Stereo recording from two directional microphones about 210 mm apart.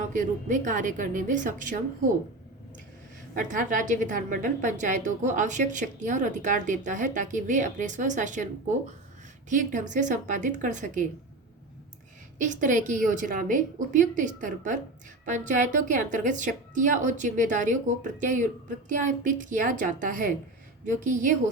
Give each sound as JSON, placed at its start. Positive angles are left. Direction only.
{"t": 0.1, "sound": "a woman's voice", "side_deg": -40}
{"t": 3.3, "sound": "a woman's voice", "side_deg": -40}
{"t": 9.5, "sound": "a woman's voice", "side_deg": -35}
{"t": 12.4, "sound": "a woman's voice", "side_deg": -35}